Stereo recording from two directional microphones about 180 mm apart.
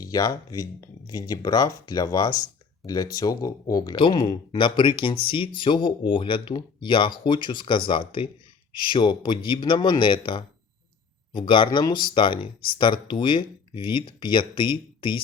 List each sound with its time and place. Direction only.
0.0 s speech: 20° left (ahead or behind)